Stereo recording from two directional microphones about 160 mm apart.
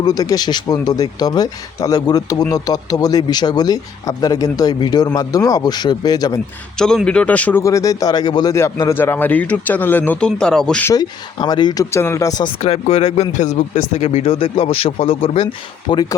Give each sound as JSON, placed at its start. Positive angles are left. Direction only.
{"t": 0.0, "sound": "speech", "side_deg": 25}
{"t": 6.7, "sound": "speech", "side_deg": 5}
{"t": 10.8, "sound": "speech", "side_deg": 25}
{"t": 12.6, "sound": "speech", "side_deg": 40}